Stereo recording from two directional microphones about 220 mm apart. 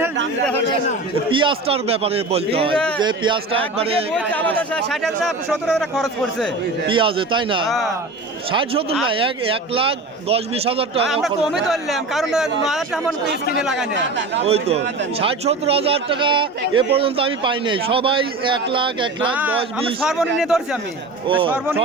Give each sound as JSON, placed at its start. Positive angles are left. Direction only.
{"t": 1.3, "sound": "a man's voice", "side_deg": -20}
{"t": 4.3, "sound": "speech", "side_deg": 5}
{"t": 6.8, "sound": "a man's voice", "side_deg": -25}
{"t": 7.7, "sound": "speech", "side_deg": 0}
{"t": 8.5, "sound": "a man's voice", "side_deg": -25}
{"t": 11.0, "sound": "speech", "side_deg": 0}
{"t": 13.9, "sound": "speech", "side_deg": -55}
{"t": 14.4, "sound": "a man's voice", "side_deg": -25}
{"t": 19.2, "sound": "speech", "side_deg": -5}